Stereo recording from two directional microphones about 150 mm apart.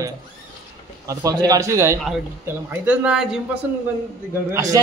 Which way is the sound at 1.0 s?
25° right (ahead or behind).